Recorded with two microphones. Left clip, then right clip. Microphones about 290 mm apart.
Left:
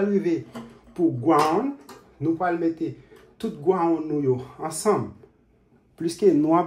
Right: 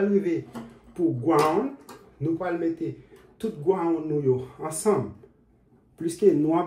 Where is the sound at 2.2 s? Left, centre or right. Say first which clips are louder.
Left 3 dB; left.